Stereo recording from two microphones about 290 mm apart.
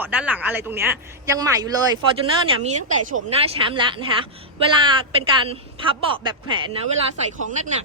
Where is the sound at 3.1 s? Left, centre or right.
Centre.